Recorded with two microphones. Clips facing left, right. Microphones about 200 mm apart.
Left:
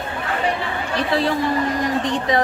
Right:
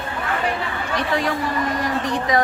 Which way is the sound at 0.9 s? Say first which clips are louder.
Left 2 dB; 30° left (ahead or behind).